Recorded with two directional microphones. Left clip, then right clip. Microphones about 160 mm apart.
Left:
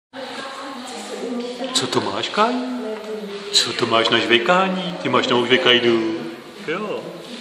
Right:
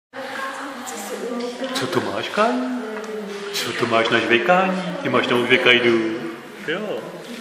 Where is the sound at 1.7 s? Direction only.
10° left (ahead or behind).